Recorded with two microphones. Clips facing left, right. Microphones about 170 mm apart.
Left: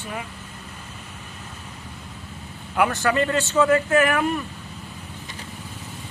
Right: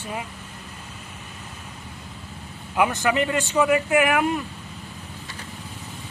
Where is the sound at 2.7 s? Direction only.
20° right (ahead or behind).